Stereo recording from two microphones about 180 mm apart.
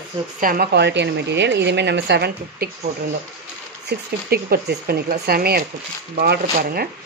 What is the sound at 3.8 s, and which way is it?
A woman's voice, 60° right (ahead or behind).